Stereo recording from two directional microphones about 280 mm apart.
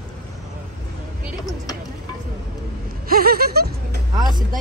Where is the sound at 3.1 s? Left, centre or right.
Right.